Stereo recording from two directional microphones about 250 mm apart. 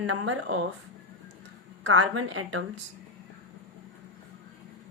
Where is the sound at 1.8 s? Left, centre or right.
Right.